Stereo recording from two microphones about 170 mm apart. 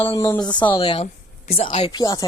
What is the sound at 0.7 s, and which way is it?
Speech, 30° left (ahead or behind).